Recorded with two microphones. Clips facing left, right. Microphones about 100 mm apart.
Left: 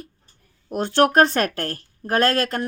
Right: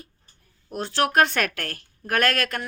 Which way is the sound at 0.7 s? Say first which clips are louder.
Left 6 dB; 50° left (ahead or behind).